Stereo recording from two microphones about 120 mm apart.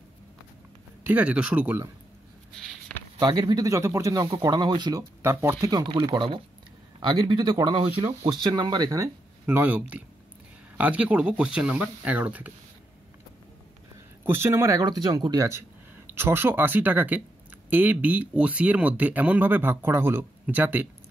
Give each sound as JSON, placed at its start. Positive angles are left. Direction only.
{"t": 1.0, "sound": "speech", "side_deg": -10}
{"t": 3.2, "sound": "speech", "side_deg": -35}
{"t": 5.2, "sound": "speech", "side_deg": -20}
{"t": 9.5, "sound": "speech", "side_deg": -15}
{"t": 14.2, "sound": "speech", "side_deg": -20}